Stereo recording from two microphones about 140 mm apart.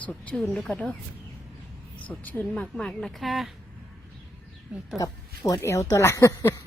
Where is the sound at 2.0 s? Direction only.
10° left (ahead or behind).